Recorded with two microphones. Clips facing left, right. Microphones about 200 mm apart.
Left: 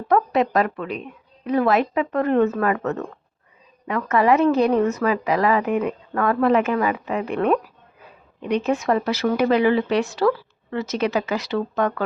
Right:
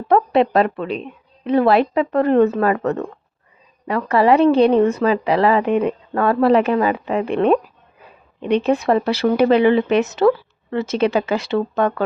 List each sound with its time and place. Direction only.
0.1 s a woman's voice: 30° right (ahead or behind)